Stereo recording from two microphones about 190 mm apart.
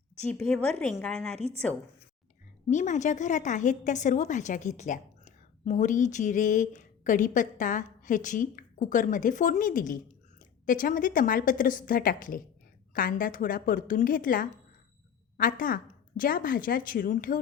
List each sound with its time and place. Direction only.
0.3 s speech: 5° left (ahead or behind)
2.6 s a woman's voice: 40° left (ahead or behind)